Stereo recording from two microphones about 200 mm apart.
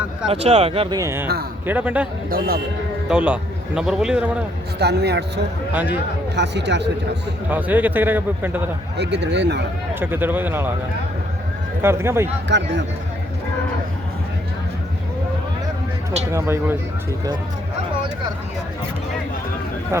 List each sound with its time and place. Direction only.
0.3 s speech: 30° right (ahead or behind)
0.9 s a man's voice: 15° right (ahead or behind)
3.1 s a man's voice: 5° right (ahead or behind)
4.8 s speech: 55° right (ahead or behind)
5.7 s a man's voice: 10° right (ahead or behind)
6.3 s speech: 60° right (ahead or behind)
7.5 s a man's voice: 10° right (ahead or behind)
9.0 s speech: 60° right (ahead or behind)
9.9 s a man's voice: 10° right (ahead or behind)
11.8 s a man's voice: 10° right (ahead or behind)
12.5 s speech: 65° right (ahead or behind)
16.3 s a man's voice: 10° right (ahead or behind)
19.9 s a man's voice: 15° right (ahead or behind)